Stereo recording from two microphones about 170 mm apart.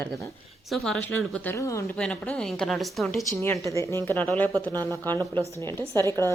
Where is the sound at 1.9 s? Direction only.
5° left (ahead or behind).